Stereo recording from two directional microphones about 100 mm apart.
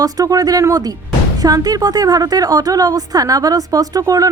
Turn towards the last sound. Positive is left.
turn(degrees=-35)  # may be behind; listen again after turning